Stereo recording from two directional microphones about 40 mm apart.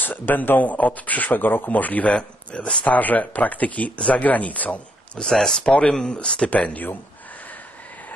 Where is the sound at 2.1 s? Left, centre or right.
Left.